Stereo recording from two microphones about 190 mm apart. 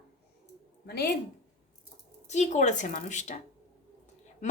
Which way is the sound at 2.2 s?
40° left (ahead or behind).